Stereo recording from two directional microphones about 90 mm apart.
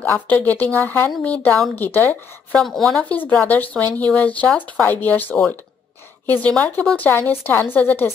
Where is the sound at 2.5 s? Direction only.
5° left (ahead or behind).